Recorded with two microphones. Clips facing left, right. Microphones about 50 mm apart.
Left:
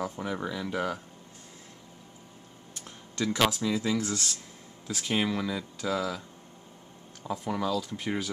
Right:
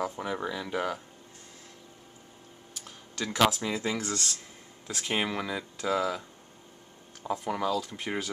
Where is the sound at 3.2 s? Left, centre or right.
Centre.